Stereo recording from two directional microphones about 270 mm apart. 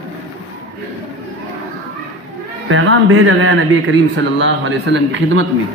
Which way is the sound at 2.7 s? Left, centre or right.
Right.